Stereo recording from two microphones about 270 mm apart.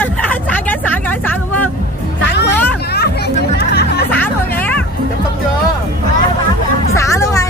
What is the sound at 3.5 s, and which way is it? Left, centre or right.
Chatter, left.